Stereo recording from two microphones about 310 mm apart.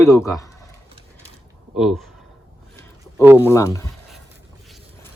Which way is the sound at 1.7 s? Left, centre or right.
Centre.